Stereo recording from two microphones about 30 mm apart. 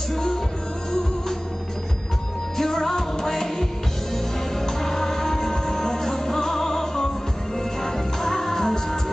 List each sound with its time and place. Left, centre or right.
0.1 s music: centre
2.5 s music: centre